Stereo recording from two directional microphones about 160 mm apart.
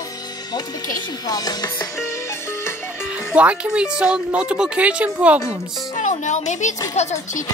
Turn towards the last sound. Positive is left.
turn(degrees=45)  # may be behind; listen again after turning